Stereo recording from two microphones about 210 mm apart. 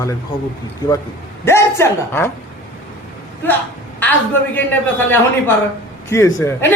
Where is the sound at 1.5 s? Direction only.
10° left (ahead or behind).